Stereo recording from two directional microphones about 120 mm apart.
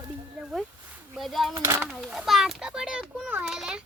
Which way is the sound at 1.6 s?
20° right (ahead or behind).